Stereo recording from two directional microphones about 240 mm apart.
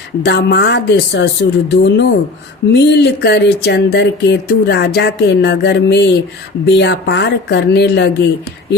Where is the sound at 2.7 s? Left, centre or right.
Left.